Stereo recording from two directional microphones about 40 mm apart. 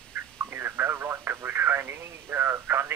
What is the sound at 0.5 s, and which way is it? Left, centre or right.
Speech, right.